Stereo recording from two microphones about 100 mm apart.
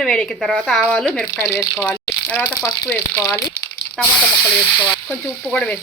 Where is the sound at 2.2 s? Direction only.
15° left (ahead or behind).